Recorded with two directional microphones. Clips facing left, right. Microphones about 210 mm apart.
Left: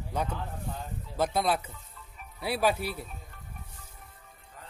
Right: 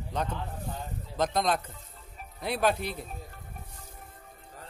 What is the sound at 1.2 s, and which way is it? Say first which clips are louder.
Speech: even; 10° left (ahead or behind).